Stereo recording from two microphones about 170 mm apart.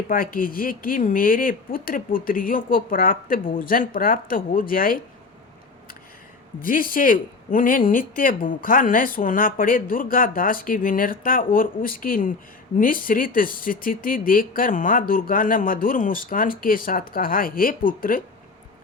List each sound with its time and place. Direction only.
0.1 s speech: 55° left (ahead or behind)
6.6 s speech: 55° left (ahead or behind)